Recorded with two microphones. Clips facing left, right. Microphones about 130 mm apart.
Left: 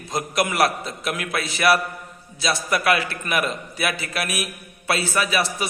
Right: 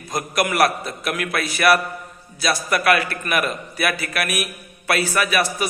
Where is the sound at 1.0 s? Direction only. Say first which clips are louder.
Right 2 dB; 25° left (ahead or behind).